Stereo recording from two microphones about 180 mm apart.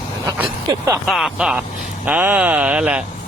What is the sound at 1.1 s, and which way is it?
Speech, centre (ahead or behind).